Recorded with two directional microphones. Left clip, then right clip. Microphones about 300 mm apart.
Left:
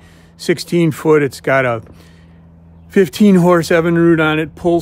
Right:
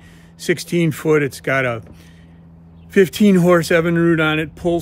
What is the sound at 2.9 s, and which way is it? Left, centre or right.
Speech, centre.